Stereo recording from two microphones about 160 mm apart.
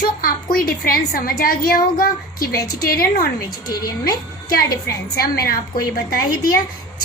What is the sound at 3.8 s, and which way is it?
Speech, 20° left (ahead or behind).